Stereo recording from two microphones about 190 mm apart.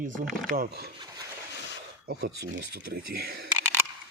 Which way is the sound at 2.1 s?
60° right (ahead or behind).